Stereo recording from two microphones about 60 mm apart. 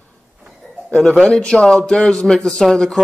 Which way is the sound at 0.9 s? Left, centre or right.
Centre.